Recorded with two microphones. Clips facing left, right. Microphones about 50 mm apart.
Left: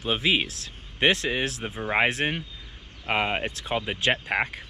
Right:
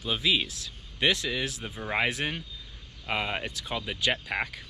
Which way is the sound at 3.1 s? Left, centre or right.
Left.